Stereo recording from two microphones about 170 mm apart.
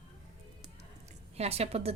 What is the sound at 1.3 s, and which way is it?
Speech, 40° right (ahead or behind).